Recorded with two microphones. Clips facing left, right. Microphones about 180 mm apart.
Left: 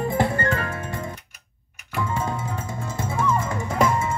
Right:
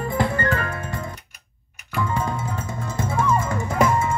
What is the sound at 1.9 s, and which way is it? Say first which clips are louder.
Music: right 1 dB; 25° left (ahead or behind).